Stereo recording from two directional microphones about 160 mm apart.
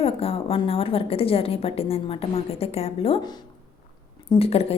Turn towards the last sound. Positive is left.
turn(degrees=40)  # may be behind; listen again after turning